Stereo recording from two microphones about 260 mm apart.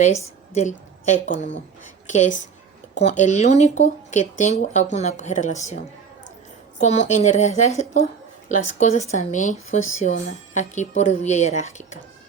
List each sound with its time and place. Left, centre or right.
0.5 s speech: left
6.7 s speech: left